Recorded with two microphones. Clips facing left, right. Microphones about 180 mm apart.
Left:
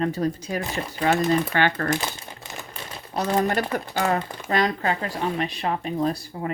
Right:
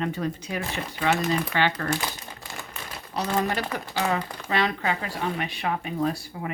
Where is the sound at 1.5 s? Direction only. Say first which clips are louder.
Left 2 dB; 50° left (ahead or behind).